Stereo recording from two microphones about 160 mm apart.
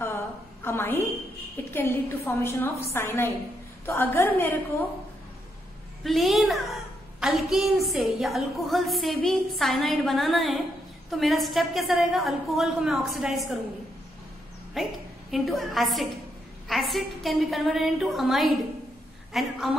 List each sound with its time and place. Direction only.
0.0 s a sound: 15° left (ahead or behind)
1.7 s a woman's voice: 15° left (ahead or behind)
6.0 s a woman's voice: centre (ahead or behind)
14.8 s a woman's voice: centre (ahead or behind)